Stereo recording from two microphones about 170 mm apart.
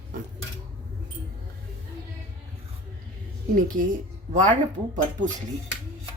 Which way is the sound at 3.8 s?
50° right (ahead or behind).